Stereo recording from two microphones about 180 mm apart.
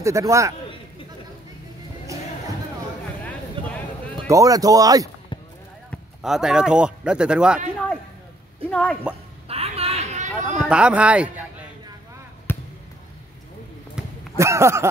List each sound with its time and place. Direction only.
0.0 s speech: 15° right (ahead or behind)
4.3 s speech: 20° right (ahead or behind)
5.9 s speech: centre (ahead or behind)
8.6 s a woman's voice: 5° left (ahead or behind)
9.5 s a sound: 35° right (ahead or behind)
10.6 s speech: 5° right (ahead or behind)
12.5 s basketball bounce: 10° left (ahead or behind)
14.0 s a sound: 5° right (ahead or behind)
14.3 s speech: 15° right (ahead or behind)